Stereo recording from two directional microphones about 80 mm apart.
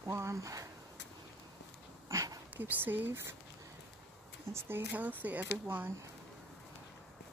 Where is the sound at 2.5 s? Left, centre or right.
Right.